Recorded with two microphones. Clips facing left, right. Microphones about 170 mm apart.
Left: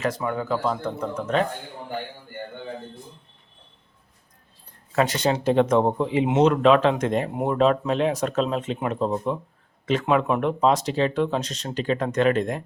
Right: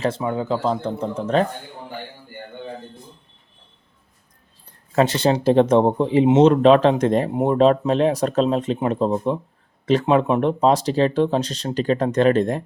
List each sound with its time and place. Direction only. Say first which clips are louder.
0.2 s speech: right 3 dB; 20° right (ahead or behind)
4.9 s speech: right 4 dB; 30° right (ahead or behind)
9.8 s speech: right 4 dB; 35° right (ahead or behind)